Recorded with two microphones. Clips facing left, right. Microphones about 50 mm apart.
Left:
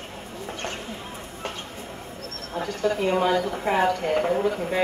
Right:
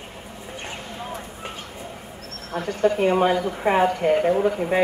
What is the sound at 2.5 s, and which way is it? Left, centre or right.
Speech, right.